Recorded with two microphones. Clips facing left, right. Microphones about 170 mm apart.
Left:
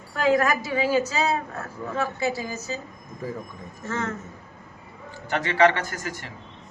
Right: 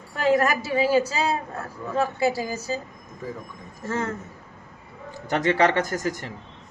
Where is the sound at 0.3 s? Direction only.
30° right (ahead or behind).